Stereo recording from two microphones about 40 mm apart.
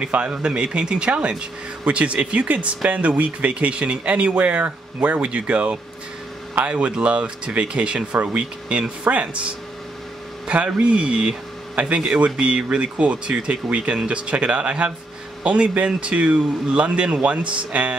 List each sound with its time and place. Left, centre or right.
0.0 s speech: right
8.1 s speech: right
10.5 s speech: right